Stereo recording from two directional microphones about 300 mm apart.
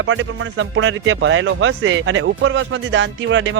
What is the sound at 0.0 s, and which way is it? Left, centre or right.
Speech, right.